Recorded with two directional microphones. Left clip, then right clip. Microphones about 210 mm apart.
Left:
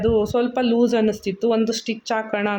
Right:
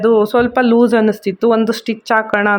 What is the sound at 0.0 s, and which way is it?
Speech, 15° right (ahead or behind).